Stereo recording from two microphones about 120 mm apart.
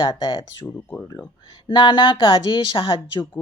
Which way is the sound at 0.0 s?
40° left (ahead or behind).